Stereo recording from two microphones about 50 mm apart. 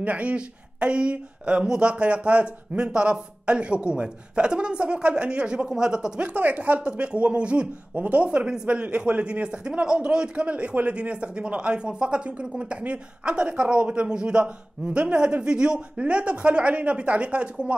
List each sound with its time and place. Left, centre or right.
0.0 s a man's voice: right
6.2 s a man's voice: right